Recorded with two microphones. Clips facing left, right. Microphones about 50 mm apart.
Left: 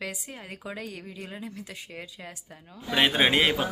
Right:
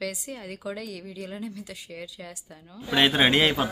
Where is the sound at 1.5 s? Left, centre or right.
Left.